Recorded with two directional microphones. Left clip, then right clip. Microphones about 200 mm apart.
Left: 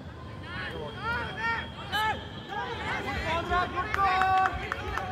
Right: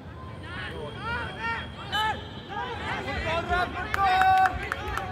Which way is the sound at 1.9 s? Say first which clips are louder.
Right 2 dB; 10° left (ahead or behind).